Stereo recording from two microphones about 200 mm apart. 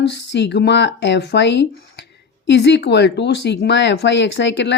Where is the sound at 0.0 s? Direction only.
60° left (ahead or behind).